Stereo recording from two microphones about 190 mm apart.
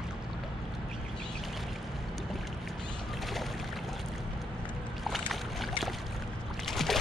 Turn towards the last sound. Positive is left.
turn(degrees=0)  # may be behind; listen again after turning